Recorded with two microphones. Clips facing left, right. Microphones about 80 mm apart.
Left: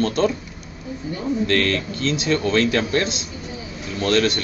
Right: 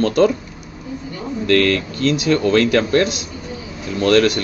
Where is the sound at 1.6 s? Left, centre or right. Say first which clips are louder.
Right 5 dB; right.